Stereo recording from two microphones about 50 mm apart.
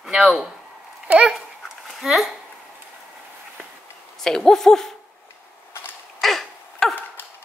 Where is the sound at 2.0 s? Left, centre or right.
Centre.